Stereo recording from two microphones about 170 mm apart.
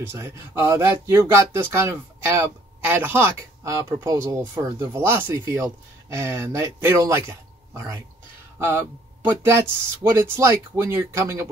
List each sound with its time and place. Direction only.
0.0 s speech: 15° right (ahead or behind)